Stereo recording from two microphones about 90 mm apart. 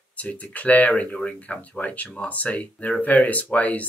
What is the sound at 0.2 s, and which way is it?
Speech, 15° left (ahead or behind).